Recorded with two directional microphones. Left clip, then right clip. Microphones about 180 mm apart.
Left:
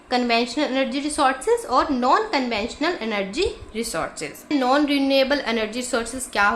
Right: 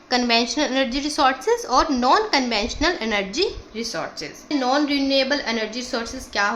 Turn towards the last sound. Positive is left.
turn(degrees=20)  # may be behind; listen again after turning